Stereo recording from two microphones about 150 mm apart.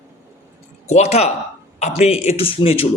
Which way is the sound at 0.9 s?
45° left (ahead or behind).